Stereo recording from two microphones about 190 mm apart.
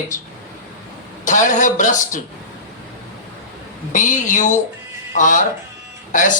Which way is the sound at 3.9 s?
40° left (ahead or behind).